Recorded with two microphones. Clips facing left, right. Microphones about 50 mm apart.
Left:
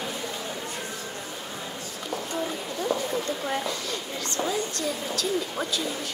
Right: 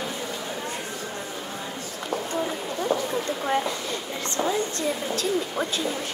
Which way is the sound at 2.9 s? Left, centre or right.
Right.